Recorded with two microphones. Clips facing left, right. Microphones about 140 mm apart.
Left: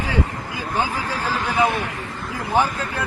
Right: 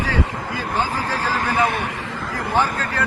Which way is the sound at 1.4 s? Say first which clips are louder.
Even; 45° right (ahead or behind).